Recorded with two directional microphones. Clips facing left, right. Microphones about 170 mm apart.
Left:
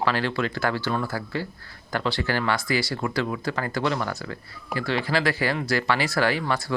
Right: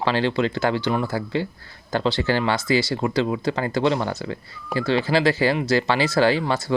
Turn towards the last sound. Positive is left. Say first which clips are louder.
# right 5 dB
turn(degrees=-25)  # may be behind; listen again after turning